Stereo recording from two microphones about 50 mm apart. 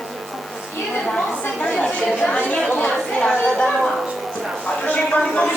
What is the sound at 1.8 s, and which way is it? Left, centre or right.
Chatter, left.